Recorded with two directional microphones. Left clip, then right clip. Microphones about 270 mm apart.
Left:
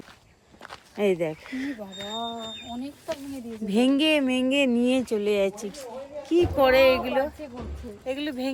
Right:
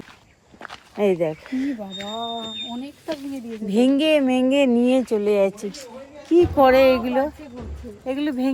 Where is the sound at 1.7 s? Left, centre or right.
Right.